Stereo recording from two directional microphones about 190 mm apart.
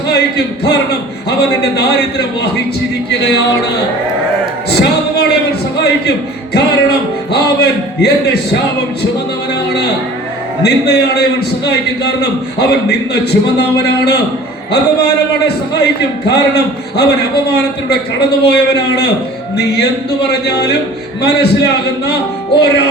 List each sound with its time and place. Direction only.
0.1 s a man's voice: 60° left (ahead or behind)
4.7 s a sound: 60° left (ahead or behind)
7.3 s a man's voice: 60° left (ahead or behind)
10.6 s a man's voice: 60° left (ahead or behind)
20.2 s a man's voice: 60° left (ahead or behind)
22.5 s a man's voice: 60° left (ahead or behind)